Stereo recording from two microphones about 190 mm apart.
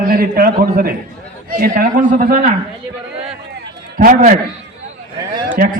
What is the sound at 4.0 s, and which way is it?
Speech, 45° right (ahead or behind).